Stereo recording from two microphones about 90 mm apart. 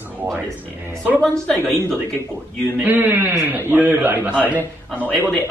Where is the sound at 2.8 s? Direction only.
20° right (ahead or behind).